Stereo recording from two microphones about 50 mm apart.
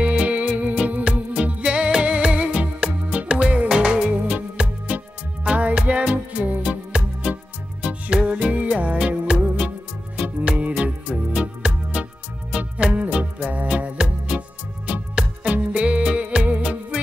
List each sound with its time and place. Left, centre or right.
0.0 s music: right